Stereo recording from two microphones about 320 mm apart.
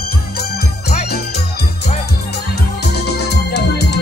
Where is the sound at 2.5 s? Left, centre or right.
Left.